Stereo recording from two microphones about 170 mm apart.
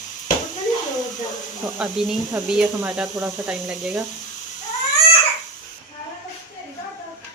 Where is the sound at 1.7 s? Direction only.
5° right (ahead or behind).